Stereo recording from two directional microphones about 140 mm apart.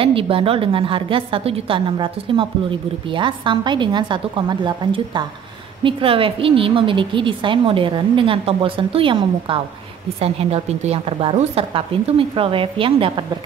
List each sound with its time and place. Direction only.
0.0 s a woman's voice: 40° right (ahead or behind)